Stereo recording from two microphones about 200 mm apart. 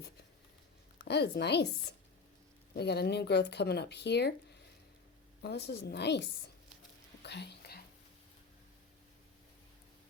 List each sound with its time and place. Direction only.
0.9 s a woman's voice: 55° left (ahead or behind)
2.7 s speech: 55° left (ahead or behind)
5.4 s speech: 55° left (ahead or behind)
7.2 s whispering: 55° left (ahead or behind)